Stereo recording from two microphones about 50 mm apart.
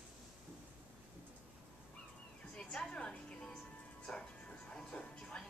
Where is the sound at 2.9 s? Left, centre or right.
Left.